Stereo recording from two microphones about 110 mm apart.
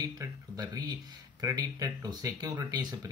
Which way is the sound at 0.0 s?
35° right (ahead or behind).